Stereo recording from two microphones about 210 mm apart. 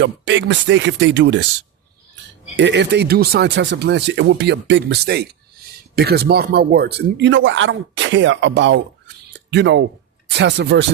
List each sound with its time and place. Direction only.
0.0 s speech: 55° right (ahead or behind)
2.6 s speech: 55° right (ahead or behind)